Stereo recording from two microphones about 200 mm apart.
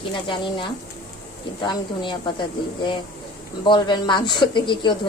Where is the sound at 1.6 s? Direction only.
25° left (ahead or behind).